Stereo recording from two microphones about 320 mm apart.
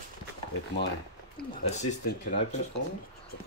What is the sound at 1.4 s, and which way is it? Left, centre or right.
Speech, left.